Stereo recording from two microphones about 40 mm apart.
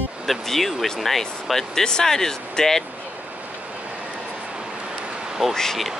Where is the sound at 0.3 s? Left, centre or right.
Centre.